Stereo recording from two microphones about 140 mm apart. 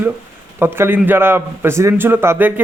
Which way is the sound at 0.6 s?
15° right (ahead or behind).